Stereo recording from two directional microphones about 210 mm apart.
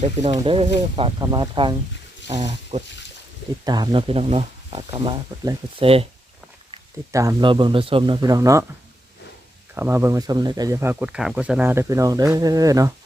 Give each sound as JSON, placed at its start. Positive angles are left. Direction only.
{"t": 0.0, "sound": "speech", "side_deg": -30}
{"t": 3.6, "sound": "speech", "side_deg": -20}
{"t": 7.1, "sound": "speech", "side_deg": -15}
{"t": 9.7, "sound": "speech", "side_deg": -10}